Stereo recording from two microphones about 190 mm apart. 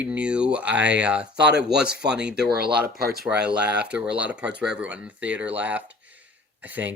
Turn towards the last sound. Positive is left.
turn(degrees=-10)  # may be behind; listen again after turning